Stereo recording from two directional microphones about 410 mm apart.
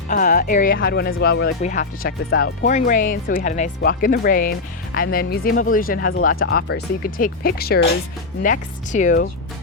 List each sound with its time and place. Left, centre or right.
0.1 s speech: centre